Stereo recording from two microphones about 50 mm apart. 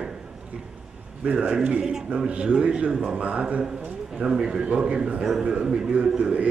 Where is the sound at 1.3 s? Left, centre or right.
Right.